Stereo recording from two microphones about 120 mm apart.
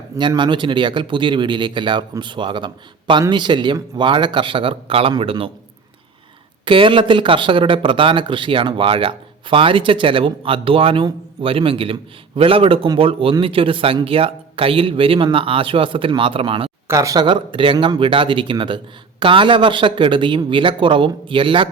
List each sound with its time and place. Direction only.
0.2 s a man's voice: 40° right (ahead or behind)
6.7 s a man's voice: 45° right (ahead or behind)
16.9 s speech: 25° right (ahead or behind)
17.2 s a man's voice: 45° right (ahead or behind)